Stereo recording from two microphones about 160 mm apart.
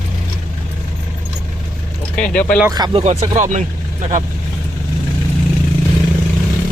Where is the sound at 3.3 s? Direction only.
50° right (ahead or behind).